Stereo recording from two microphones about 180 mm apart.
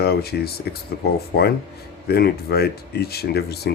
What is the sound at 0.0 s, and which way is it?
Speech, 60° left (ahead or behind).